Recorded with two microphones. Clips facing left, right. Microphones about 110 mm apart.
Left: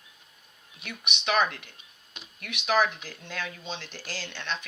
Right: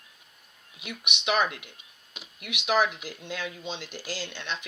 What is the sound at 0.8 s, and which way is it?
Speech, 10° right (ahead or behind).